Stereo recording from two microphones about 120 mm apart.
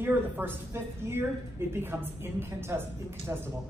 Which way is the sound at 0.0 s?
15° right (ahead or behind).